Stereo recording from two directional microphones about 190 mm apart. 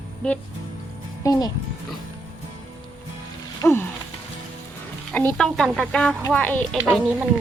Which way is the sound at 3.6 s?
15° left (ahead or behind).